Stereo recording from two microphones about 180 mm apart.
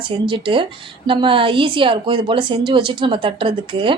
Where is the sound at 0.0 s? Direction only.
30° right (ahead or behind).